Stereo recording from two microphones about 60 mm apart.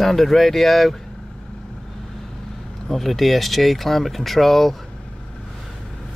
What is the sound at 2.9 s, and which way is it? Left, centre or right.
Speech, centre.